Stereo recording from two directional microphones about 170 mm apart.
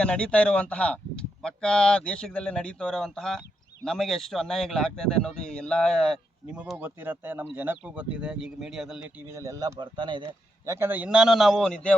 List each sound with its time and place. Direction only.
0.0 s speech: 5° left (ahead or behind)
9.3 s speech: 20° right (ahead or behind)
10.7 s speech: 15° right (ahead or behind); by 11.9 s 5° left (ahead or behind)